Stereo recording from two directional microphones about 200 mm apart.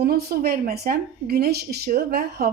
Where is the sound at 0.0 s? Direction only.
50° right (ahead or behind).